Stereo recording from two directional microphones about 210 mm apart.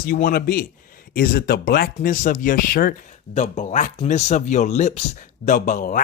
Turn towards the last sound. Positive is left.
turn(degrees=35)  # may be behind; listen again after turning